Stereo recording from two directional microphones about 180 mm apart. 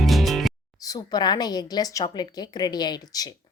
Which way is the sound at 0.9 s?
20° left (ahead or behind).